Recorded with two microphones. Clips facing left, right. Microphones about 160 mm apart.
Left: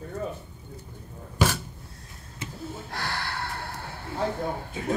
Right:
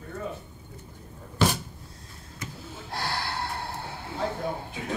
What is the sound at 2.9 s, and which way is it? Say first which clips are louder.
Gasp: right 3 dB; 25° right (ahead or behind).